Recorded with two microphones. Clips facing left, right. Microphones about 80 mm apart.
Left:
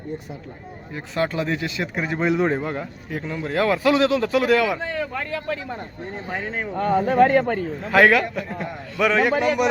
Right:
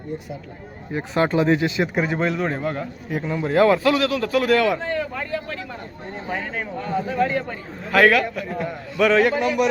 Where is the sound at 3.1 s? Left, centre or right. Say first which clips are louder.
Right 4 dB; centre.